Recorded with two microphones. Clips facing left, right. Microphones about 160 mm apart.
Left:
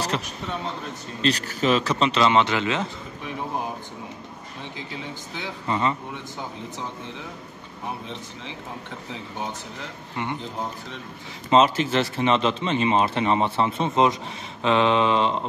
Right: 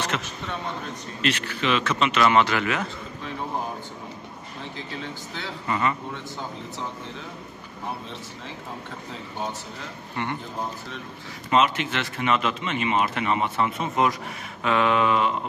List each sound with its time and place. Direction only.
0.1 s speech: 30° left (ahead or behind)
4.7 s speech: 15° left (ahead or behind)
5.7 s speech: 25° left (ahead or behind)
11.5 s speech: 35° left (ahead or behind)